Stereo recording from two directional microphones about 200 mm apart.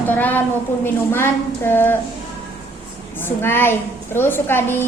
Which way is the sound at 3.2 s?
10° left (ahead or behind).